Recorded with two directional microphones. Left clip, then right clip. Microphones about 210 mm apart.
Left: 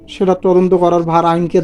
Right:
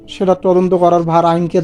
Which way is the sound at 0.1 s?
Centre (ahead or behind).